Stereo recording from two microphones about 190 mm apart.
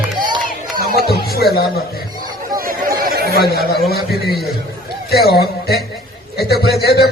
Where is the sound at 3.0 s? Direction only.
50° right (ahead or behind).